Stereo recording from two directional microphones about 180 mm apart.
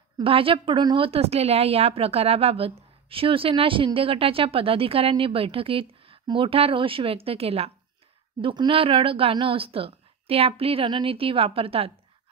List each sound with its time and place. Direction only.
0.2 s a woman's voice: 30° right (ahead or behind)